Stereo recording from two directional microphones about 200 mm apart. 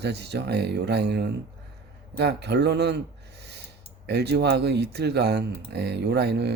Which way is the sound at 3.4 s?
55° right (ahead or behind).